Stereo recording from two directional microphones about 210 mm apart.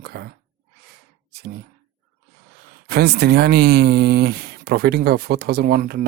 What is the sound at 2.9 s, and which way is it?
Speech, 50° right (ahead or behind).